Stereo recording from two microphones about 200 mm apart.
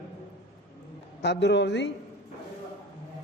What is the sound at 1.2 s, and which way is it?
Speech, 60° left (ahead or behind).